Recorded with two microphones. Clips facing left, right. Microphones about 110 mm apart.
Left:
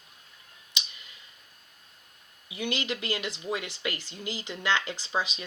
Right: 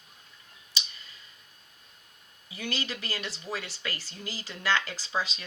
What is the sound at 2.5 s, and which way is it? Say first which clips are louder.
Speech: left 3 dB; 20° left (ahead or behind).